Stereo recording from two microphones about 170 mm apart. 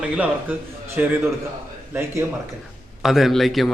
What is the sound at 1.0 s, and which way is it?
Speech, 10° right (ahead or behind).